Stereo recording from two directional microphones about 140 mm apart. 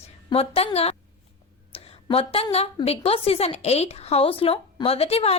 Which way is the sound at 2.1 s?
45° left (ahead or behind).